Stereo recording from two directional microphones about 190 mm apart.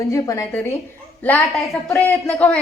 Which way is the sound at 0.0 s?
15° left (ahead or behind).